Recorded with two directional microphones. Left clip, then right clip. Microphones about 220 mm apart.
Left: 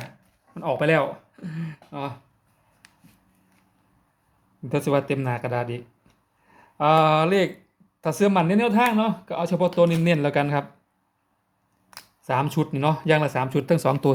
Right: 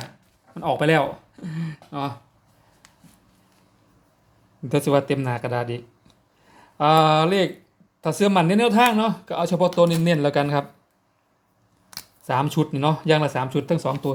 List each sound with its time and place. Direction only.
0.5 s speech: 5° right (ahead or behind)
2.8 s a sound: 15° left (ahead or behind)
4.7 s speech: 5° right (ahead or behind)
11.9 s speech: 5° right (ahead or behind); by 13.9 s 20° left (ahead or behind)